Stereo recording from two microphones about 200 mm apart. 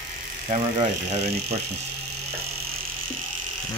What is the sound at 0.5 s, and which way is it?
Speech, 30° right (ahead or behind).